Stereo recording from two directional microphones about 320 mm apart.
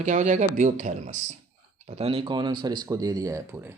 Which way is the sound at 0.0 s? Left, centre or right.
Right.